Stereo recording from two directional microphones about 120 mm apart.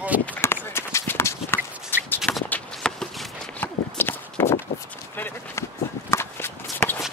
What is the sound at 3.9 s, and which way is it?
Walk, 15° left (ahead or behind).